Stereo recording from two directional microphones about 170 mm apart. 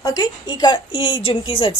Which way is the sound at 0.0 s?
25° left (ahead or behind).